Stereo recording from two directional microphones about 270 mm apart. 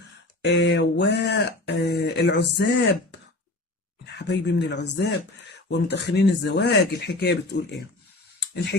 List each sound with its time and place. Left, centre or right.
0.4 s speech: left